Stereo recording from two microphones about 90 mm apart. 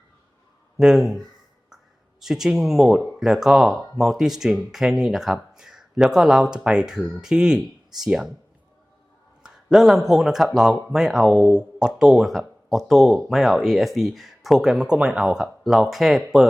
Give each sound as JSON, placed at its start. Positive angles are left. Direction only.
{"t": 0.8, "sound": "speech", "side_deg": -5}
{"t": 2.2, "sound": "speech", "side_deg": -5}
{"t": 9.4, "sound": "speech", "side_deg": -5}